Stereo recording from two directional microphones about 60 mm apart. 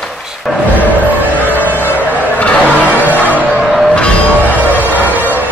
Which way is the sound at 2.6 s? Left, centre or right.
Right.